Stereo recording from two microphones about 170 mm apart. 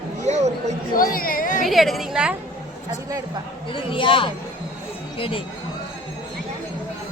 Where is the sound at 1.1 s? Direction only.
55° left (ahead or behind).